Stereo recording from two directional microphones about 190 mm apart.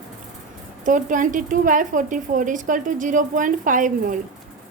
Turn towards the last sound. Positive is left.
turn(degrees=-45)  # may be behind; listen again after turning